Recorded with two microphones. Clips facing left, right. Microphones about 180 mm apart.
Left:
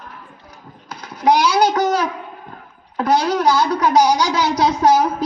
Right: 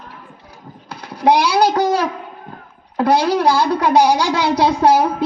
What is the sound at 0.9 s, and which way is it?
Speech, 30° right (ahead or behind).